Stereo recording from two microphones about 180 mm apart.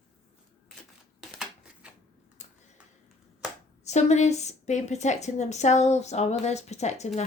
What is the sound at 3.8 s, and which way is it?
Speech, 40° left (ahead or behind).